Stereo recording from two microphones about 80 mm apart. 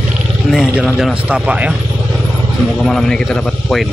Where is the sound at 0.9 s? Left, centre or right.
Centre.